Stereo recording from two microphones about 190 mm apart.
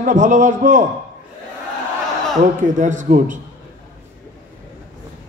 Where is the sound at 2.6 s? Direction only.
40° right (ahead or behind).